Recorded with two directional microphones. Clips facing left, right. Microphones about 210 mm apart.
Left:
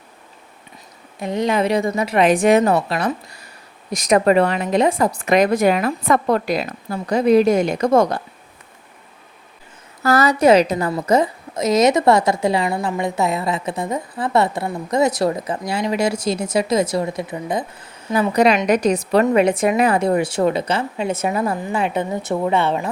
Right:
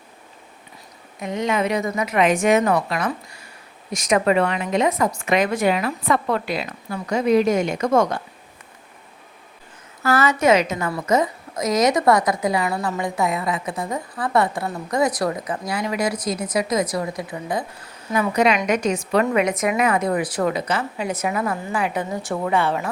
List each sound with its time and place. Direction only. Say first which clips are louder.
1.2 s a woman's voice: left 3 dB; 35° left (ahead or behind)
10.0 s a woman's voice: left 4 dB; 40° left (ahead or behind); by 17.7 s 20° left (ahead or behind)
18.1 s a woman's voice: left 3 dB; 35° left (ahead or behind)